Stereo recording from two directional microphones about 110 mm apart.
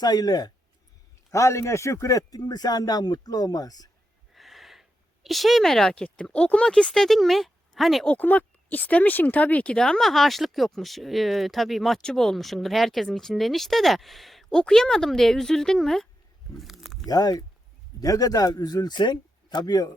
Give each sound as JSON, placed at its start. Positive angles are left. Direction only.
{"t": 0.0, "sound": "a man's voice", "side_deg": 35}
{"t": 1.3, "sound": "a man's voice", "side_deg": 25}
{"t": 4.4, "sound": "speech", "side_deg": 0}
{"t": 8.0, "sound": "speech", "side_deg": 15}
{"t": 16.6, "sound": "a sound", "side_deg": 0}
{"t": 17.1, "sound": "a man's voice", "side_deg": 35}